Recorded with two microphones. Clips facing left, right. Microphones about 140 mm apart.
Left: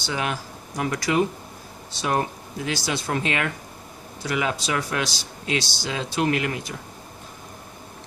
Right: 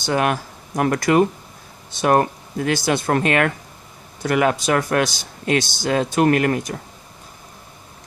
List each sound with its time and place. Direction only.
0.0 s speech: 55° right (ahead or behind)